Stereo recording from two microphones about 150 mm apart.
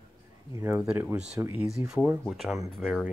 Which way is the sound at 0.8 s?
5° right (ahead or behind).